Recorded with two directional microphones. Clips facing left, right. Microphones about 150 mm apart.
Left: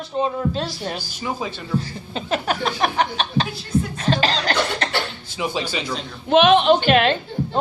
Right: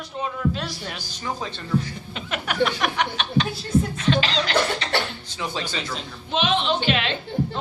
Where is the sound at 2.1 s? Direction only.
35° left (ahead or behind).